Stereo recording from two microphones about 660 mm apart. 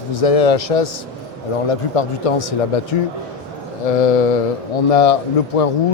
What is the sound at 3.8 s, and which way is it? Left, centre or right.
A man's voice, left.